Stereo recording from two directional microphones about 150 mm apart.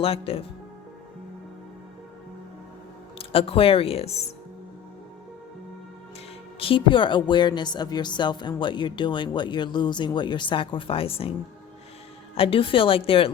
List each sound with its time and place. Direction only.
0.0 s speech: 40° left (ahead or behind)
3.2 s speech: 40° left (ahead or behind)
6.6 s speech: 35° left (ahead or behind)